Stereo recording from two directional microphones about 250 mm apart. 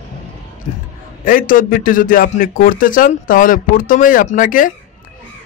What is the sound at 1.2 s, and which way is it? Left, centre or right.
A man's voice, left.